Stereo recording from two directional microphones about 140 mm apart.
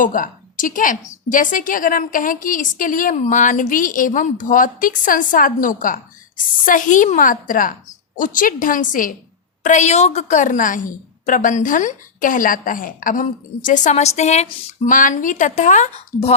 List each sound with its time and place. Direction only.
0.0 s a woman's voice: 75° left (ahead or behind)
9.6 s a woman's voice: 55° left (ahead or behind)
14.8 s speech: 70° left (ahead or behind)